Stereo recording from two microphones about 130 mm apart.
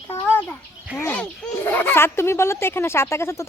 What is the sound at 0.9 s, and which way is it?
Speech, 15° left (ahead or behind).